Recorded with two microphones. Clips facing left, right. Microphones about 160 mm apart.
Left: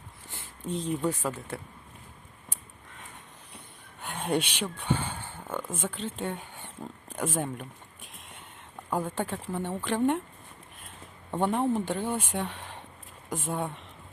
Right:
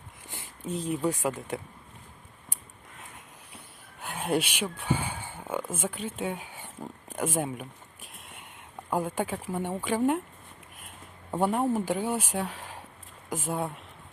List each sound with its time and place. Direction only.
0.3 s speech: 15° right (ahead or behind)
4.0 s speech: 5° right (ahead or behind)
8.9 s speech: 10° right (ahead or behind)
11.3 s speech: 10° right (ahead or behind)